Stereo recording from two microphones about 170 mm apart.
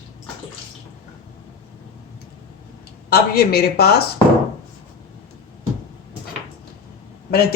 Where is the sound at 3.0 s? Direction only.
65° left (ahead or behind).